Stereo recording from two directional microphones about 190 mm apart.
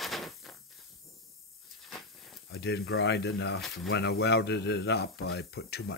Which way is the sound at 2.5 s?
60° left (ahead or behind).